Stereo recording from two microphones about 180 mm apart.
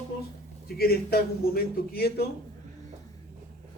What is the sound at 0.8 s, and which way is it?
A man's voice, 60° left (ahead or behind).